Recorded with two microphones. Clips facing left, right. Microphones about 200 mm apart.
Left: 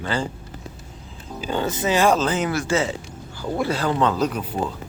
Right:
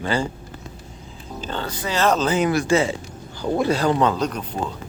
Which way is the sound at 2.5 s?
15° right (ahead or behind).